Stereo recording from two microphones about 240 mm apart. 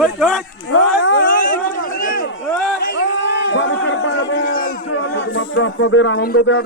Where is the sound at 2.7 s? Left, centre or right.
Left.